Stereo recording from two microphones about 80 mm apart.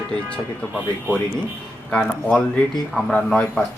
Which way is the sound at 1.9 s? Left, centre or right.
Centre.